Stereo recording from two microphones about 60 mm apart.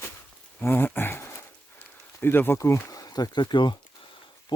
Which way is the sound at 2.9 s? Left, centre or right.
Left.